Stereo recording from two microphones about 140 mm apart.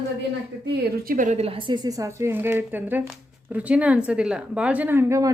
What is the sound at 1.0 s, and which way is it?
A woman's voice, 80° right.